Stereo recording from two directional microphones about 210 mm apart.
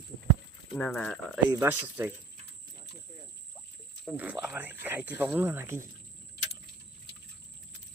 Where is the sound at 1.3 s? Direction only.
10° right (ahead or behind).